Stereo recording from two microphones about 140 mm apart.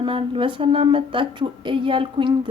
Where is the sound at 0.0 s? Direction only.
40° right (ahead or behind).